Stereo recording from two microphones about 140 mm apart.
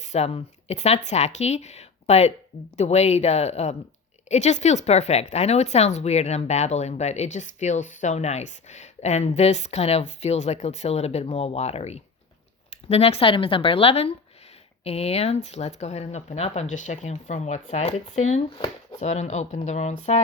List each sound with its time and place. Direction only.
0.0 s a woman's voice: 55° left (ahead or behind)
18.5 s speech: 35° left (ahead or behind)
18.9 s speech: 55° left (ahead or behind)